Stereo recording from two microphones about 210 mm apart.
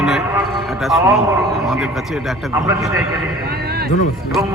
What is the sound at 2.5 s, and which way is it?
Speech, 15° right (ahead or behind).